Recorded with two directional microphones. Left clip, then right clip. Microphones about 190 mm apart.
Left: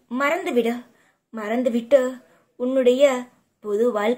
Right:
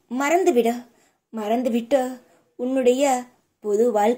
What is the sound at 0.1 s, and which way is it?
A woman's voice, 40° right (ahead or behind).